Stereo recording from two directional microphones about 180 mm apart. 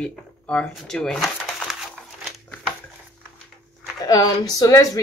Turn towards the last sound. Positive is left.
turn(degrees=20)  # may be behind; listen again after turning